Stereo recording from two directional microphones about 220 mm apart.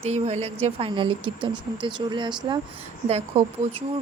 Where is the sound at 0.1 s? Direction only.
30° right (ahead or behind).